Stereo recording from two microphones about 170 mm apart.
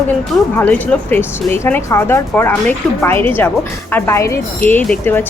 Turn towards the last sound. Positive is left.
turn(degrees=10)  # may be behind; listen again after turning